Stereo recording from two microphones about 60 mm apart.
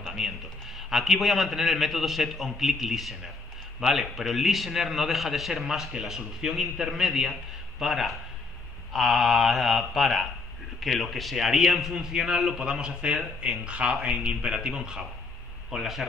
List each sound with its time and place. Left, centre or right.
0.1 s a man's voice: centre